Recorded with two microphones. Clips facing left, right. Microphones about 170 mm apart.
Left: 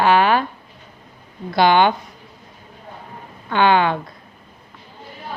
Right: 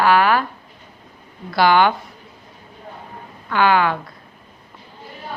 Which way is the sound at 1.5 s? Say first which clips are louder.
Even; 20° left (ahead or behind).